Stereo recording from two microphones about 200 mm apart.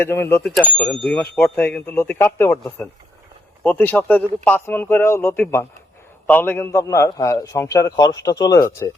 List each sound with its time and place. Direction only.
0.0 s speech: 10° left (ahead or behind)